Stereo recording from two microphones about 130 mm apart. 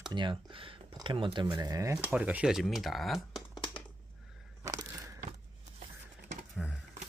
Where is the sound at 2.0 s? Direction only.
10° right (ahead or behind).